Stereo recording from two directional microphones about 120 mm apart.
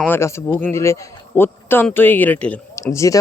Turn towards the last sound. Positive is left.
turn(degrees=25)  # may be behind; listen again after turning